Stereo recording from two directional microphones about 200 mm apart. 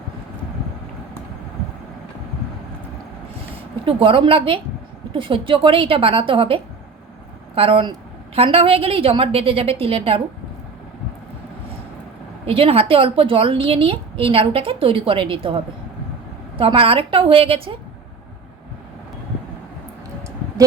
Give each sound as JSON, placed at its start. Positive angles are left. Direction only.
{"t": 3.8, "sound": "a woman's voice", "side_deg": -25}
{"t": 12.5, "sound": "a woman's voice", "side_deg": -30}
{"t": 16.6, "sound": "a woman's voice", "side_deg": -25}